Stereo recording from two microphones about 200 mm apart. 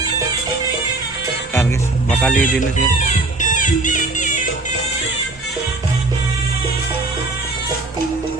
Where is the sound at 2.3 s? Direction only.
40° left (ahead or behind).